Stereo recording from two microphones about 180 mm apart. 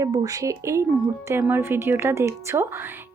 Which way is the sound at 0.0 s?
20° right (ahead or behind).